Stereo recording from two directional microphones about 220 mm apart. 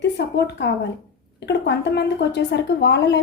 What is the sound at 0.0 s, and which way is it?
Speech, 50° left (ahead or behind).